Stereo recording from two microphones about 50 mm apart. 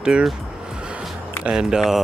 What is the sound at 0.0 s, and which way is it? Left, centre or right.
Speech, centre.